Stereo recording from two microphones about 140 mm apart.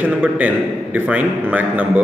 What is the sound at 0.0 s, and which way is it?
Speech, 10° right (ahead or behind).